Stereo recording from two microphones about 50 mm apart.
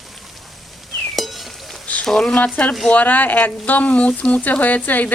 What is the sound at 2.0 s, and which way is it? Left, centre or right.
Speech, centre.